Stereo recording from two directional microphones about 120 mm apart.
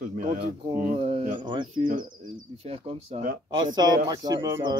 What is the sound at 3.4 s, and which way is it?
Speech, 35° right (ahead or behind).